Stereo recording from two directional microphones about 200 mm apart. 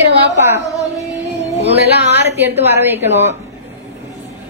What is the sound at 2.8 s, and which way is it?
Speech, 10° right (ahead or behind).